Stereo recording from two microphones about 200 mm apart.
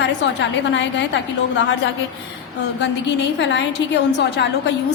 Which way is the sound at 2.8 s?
60° left (ahead or behind).